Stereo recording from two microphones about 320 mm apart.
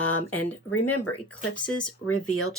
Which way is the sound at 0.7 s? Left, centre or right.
Left.